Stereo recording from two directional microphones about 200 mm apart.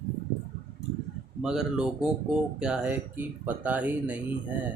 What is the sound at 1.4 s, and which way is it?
Speech, 5° right (ahead or behind).